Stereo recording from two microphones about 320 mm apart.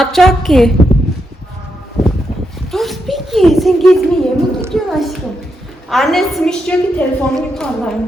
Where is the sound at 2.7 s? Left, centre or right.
Centre.